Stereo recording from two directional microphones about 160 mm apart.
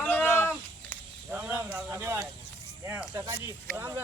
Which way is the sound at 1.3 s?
15° right (ahead or behind).